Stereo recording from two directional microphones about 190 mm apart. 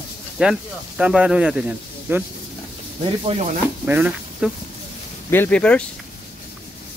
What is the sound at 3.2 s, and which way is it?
Speech, 35° right (ahead or behind).